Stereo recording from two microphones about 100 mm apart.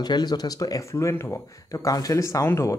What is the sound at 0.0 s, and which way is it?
Speech, 45° left (ahead or behind).